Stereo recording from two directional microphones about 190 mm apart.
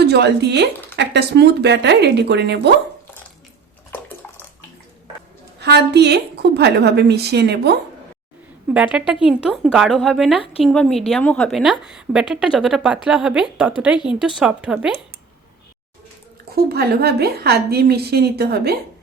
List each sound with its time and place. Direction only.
0.0 s speech: 60° right (ahead or behind)
5.5 s speech: 60° right (ahead or behind)
8.7 s a woman's voice: 5° right (ahead or behind)
16.6 s speech: 55° right (ahead or behind)